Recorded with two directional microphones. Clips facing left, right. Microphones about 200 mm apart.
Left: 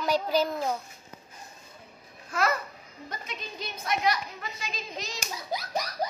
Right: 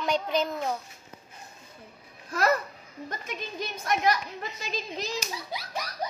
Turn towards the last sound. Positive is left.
turn(degrees=35)  # may be behind; listen again after turning